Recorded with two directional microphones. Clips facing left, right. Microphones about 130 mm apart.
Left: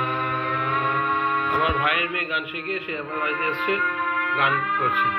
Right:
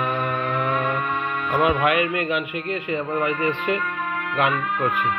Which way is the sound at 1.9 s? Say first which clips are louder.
Right 6 dB; 40° left (ahead or behind).